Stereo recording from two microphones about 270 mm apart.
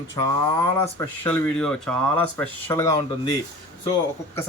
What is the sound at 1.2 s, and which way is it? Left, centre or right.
Speech, centre.